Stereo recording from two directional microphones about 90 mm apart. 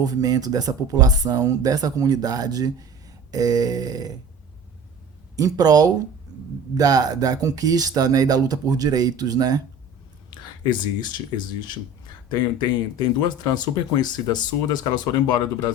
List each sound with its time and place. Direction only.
0.0 s speech: 45° right (ahead or behind)
5.4 s speech: 45° right (ahead or behind)
10.2 s a sound: 55° left (ahead or behind)
12.3 s speech: 50° left (ahead or behind)